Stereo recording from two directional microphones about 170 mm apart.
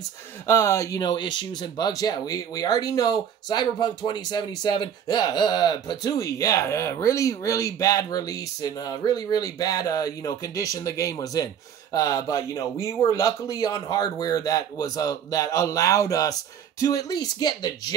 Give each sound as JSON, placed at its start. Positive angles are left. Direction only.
{"t": 0.5, "sound": "speech", "side_deg": 15}